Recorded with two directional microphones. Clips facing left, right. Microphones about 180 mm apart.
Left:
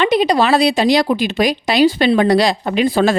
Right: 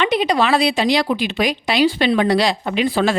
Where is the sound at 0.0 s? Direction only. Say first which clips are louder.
Left 3 dB; 40° left (ahead or behind).